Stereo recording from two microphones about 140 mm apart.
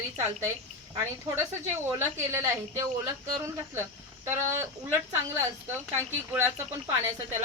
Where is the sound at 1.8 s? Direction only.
15° right (ahead or behind).